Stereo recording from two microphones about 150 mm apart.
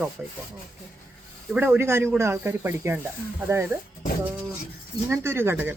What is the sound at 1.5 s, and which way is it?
Speech, 15° right (ahead or behind).